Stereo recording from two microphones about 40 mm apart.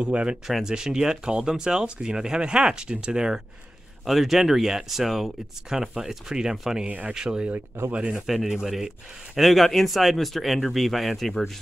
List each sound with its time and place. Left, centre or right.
0.0 s speech: right
0.7 s speech: centre
4.0 s speech: centre
6.9 s speech: right
8.3 s speech: centre
9.5 s speech: centre